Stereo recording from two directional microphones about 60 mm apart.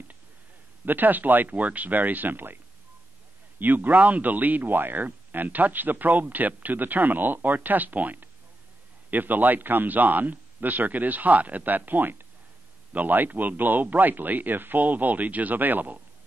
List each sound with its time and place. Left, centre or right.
0.8 s speech: right